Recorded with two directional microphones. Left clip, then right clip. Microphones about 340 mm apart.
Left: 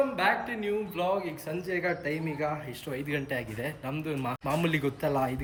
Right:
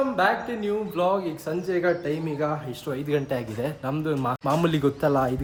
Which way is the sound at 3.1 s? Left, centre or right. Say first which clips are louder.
Right 7 dB; centre.